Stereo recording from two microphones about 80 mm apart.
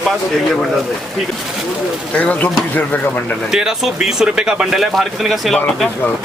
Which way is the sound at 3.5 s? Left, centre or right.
Centre.